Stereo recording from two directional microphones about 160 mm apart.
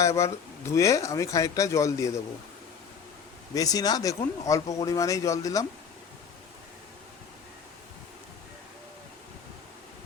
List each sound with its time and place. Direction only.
0.0 s speech: 20° left (ahead or behind)
3.5 s speech: 20° left (ahead or behind)